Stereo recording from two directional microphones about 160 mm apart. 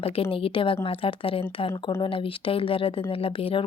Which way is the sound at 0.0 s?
35° left (ahead or behind).